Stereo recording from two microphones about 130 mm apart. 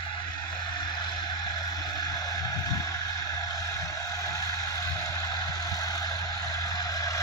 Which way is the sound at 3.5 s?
25° left (ahead or behind).